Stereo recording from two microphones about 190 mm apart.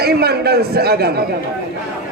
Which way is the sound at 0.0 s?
55° right (ahead or behind).